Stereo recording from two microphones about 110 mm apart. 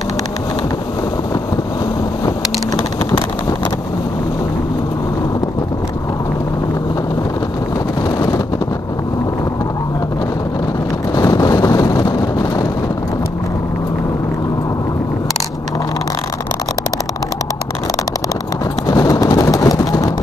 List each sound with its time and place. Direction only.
11.1 s vehicle: 30° left (ahead or behind)
18.9 s vehicle: 35° left (ahead or behind)